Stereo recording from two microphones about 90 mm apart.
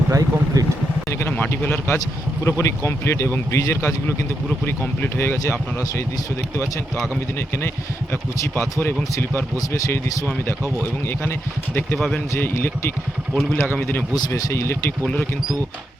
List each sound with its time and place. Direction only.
0.1 s vehicle: 40° right (ahead or behind)
1.3 s a man's voice: 20° left (ahead or behind)
2.4 s speech: 30° left (ahead or behind)
4.6 s speech: 20° left (ahead or behind)
7.0 s speech: 25° left (ahead or behind)
11.2 s speech: 25° left (ahead or behind)
11.9 s speech: 5° left (ahead or behind)
12.3 s speech: 25° left (ahead or behind)
13.3 s speech: centre (ahead or behind)
13.7 s speech: 25° left (ahead or behind)